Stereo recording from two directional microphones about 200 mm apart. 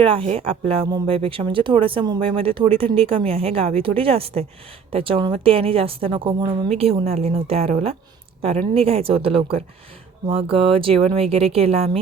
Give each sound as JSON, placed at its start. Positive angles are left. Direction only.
{"t": 0.0, "sound": "a woman's voice", "side_deg": -25}